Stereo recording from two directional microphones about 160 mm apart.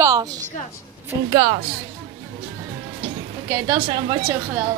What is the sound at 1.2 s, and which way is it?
Speech, 30° right (ahead or behind).